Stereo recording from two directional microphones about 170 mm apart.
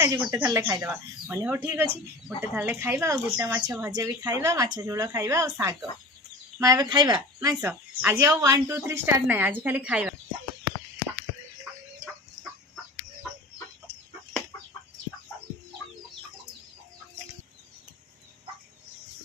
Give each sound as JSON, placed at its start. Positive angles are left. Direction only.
{"t": 0.0, "sound": "speech", "side_deg": -15}